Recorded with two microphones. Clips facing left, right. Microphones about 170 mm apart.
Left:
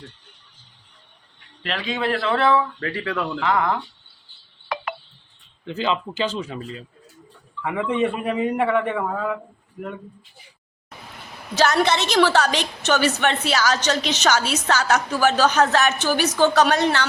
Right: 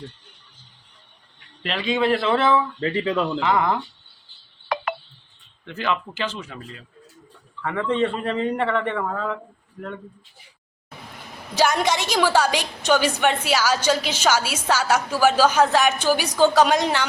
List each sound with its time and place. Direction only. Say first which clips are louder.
1.6 s a man's voice: right 3 dB; centre (ahead or behind)
2.8 s speech: right 4 dB; 20° right (ahead or behind)
3.4 s a man's voice: left 1 dB; 5° right (ahead or behind)
5.6 s speech: left 2 dB; 25° left (ahead or behind)
7.6 s a man's voice: even; 10° left (ahead or behind)
11.5 s a woman's voice: left 1 dB; 10° right (ahead or behind)